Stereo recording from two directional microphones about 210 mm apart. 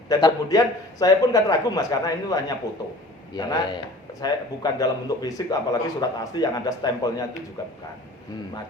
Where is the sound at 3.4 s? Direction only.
20° left (ahead or behind).